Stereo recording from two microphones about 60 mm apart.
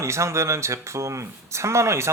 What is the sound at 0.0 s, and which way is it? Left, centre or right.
Speech, right.